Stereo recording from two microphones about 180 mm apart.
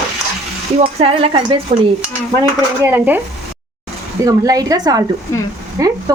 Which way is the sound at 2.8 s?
10° right (ahead or behind).